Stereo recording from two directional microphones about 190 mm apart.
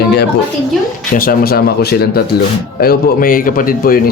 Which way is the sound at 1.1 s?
50° left (ahead or behind).